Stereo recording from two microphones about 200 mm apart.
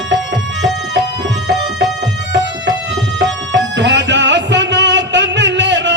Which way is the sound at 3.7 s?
65° right (ahead or behind).